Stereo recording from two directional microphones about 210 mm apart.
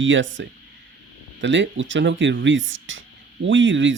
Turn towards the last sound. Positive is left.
turn(degrees=-60)  # may be behind; listen again after turning